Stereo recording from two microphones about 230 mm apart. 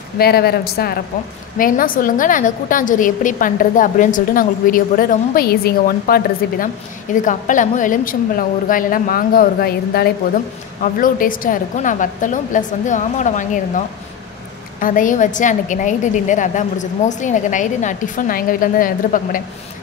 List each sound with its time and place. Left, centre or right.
0.2 s a woman's voice: left